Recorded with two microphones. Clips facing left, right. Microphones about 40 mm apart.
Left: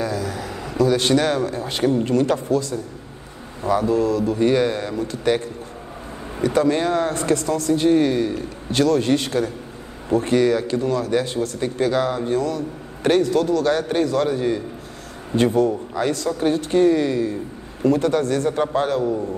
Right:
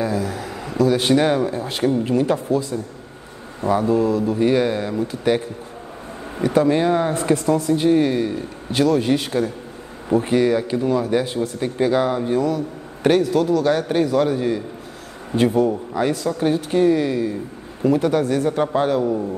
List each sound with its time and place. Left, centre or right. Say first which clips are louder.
0.0 s a man's voice: right 2 dB; centre
1.1 s speech: right 2 dB; centre
1.5 s a man's voice: even; centre
3.6 s a man's voice: right 1 dB; centre
6.4 s speech: right 2 dB; centre
7.7 s a man's voice: left 2 dB; centre
18.5 s a man's voice: right 1 dB; centre